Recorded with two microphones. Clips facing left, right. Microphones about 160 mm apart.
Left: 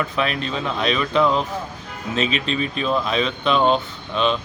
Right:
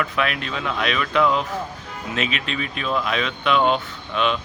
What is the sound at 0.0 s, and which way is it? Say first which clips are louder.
Speech: left 1 dB; 30° left (ahead or behind).